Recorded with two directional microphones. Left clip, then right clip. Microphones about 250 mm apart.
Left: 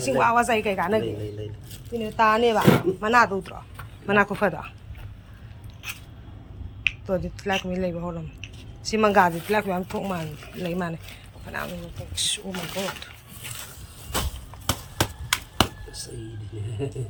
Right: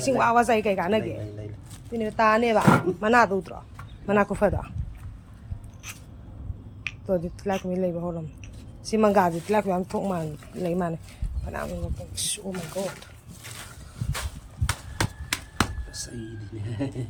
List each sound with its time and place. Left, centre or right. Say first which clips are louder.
0.0 s speech: even; centre
6.8 s speech: left 2 dB; centre
12.1 s speech: left 5 dB; centre
14.7 s a sound: left 3 dB; centre
16.0 s speech: right 1 dB; right